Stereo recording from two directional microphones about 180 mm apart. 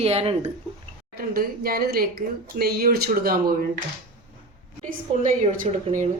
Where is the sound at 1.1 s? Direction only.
55° right (ahead or behind).